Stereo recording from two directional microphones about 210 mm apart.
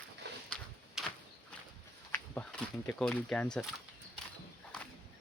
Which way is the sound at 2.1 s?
5° left (ahead or behind).